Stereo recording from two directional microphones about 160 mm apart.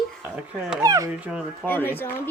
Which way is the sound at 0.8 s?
20° right (ahead or behind).